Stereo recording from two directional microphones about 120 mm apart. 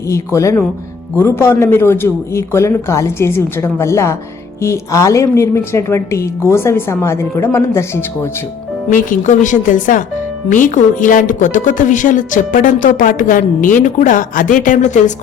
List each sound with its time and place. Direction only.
0.1 s a woman's voice: 25° left (ahead or behind)
8.9 s a woman's voice: 90° left